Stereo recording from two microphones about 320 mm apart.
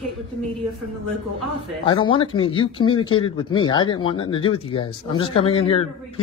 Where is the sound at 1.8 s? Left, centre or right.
Centre.